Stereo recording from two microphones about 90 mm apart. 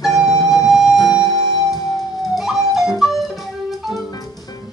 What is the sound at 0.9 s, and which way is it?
Music, 45° left (ahead or behind).